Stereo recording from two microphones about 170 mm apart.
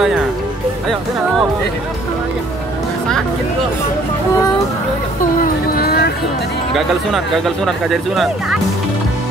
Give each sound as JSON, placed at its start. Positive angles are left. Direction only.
{"t": 5.4, "sound": "music", "side_deg": 65}
{"t": 6.7, "sound": "speech", "side_deg": 0}